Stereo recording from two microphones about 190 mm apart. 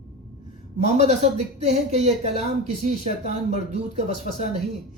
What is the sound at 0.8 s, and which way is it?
A woman's voice, 35° right (ahead or behind).